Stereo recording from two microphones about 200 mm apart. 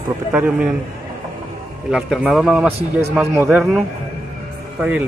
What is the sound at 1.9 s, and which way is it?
A man's voice, centre (ahead or behind).